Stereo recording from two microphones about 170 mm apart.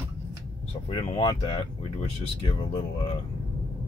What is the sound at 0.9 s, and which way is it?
Speech, 30° left (ahead or behind).